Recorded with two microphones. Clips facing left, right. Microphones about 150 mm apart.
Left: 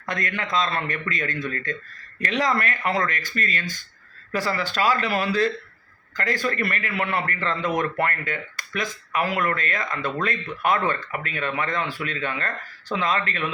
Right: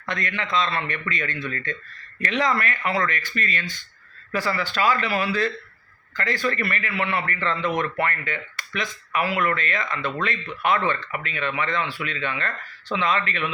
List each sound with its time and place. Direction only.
0.1 s a man's voice: 45° left (ahead or behind)